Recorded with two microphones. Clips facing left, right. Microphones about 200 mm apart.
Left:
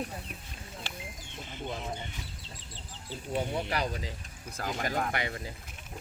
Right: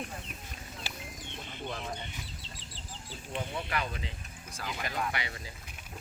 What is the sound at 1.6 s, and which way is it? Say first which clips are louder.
Speech: left 2 dB; 10° left (ahead or behind).